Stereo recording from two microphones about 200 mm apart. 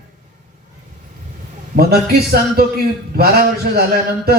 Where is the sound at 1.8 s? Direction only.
50° right (ahead or behind).